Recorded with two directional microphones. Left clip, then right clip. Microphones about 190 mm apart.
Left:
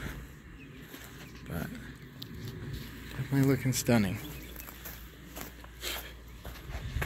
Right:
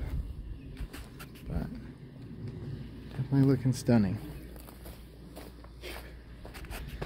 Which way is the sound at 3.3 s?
15° right (ahead or behind).